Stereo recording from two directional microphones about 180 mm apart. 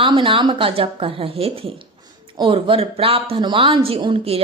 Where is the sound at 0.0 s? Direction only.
30° right (ahead or behind).